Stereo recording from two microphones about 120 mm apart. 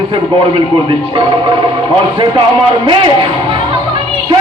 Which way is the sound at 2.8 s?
45° right (ahead or behind).